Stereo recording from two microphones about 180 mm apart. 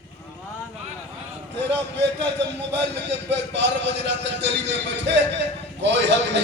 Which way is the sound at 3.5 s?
75° right (ahead or behind).